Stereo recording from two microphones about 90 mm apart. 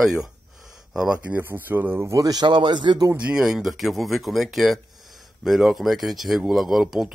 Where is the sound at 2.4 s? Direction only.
55° right (ahead or behind).